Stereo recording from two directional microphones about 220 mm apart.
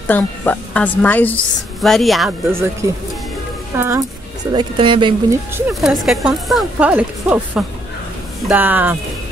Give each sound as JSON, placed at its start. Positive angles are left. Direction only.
{"t": 0.1, "sound": "a woman's voice", "side_deg": 5}
{"t": 2.5, "sound": "speech", "side_deg": -10}
{"t": 4.5, "sound": "speech", "side_deg": -20}
{"t": 5.7, "sound": "a woman's voice", "side_deg": 0}